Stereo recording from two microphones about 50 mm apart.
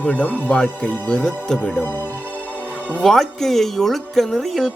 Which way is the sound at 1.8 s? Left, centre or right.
Left.